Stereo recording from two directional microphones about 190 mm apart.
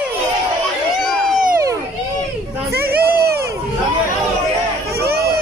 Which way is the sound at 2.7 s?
55° right (ahead or behind).